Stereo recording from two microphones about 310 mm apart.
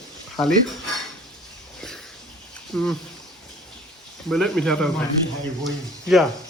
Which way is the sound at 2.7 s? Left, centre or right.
Centre.